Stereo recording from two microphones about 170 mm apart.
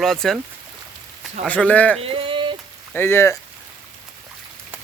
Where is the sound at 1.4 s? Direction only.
5° left (ahead or behind).